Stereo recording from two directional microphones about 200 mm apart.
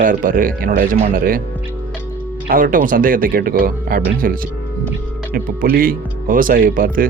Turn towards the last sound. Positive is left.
turn(degrees=-45)  # may be behind; listen again after turning